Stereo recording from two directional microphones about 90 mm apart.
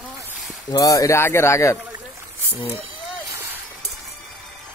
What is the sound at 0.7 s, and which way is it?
Speech, 40° left (ahead or behind).